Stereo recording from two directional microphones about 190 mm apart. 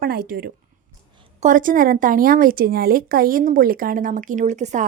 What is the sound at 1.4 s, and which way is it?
A woman's voice, 40° right (ahead or behind).